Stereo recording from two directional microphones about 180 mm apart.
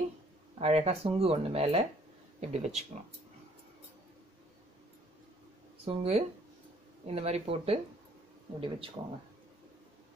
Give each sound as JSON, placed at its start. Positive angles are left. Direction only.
{"t": 0.6, "sound": "speech", "side_deg": -35}
{"t": 5.9, "sound": "speech", "side_deg": -35}